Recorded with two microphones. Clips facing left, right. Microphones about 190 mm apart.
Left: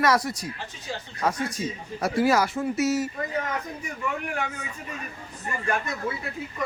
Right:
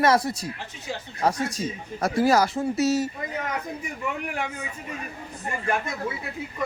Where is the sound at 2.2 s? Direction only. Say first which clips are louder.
Right 2 dB; 40° right (ahead or behind).